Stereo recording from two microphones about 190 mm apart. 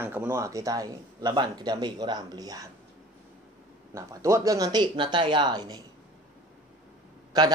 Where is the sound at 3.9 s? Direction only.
15° right (ahead or behind).